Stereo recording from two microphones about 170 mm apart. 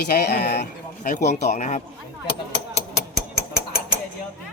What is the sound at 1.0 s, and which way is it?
Speech, 50° left (ahead or behind).